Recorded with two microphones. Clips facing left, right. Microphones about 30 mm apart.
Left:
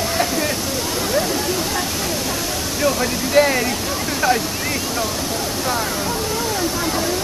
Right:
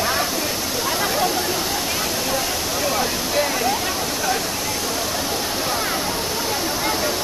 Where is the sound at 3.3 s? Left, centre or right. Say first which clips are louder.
Left 8 dB; left.